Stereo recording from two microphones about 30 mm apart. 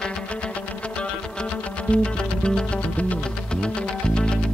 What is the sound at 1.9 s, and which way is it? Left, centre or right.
Music, left.